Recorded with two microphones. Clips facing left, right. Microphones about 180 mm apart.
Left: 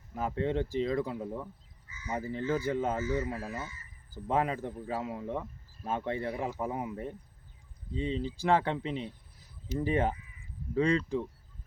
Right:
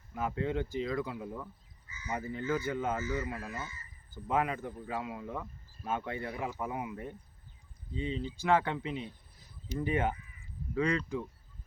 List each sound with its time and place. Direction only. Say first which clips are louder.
0.1 s speech: left 2 dB; 35° left (ahead or behind)